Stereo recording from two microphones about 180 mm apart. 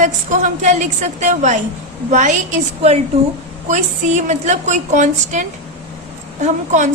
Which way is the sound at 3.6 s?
40° right (ahead or behind).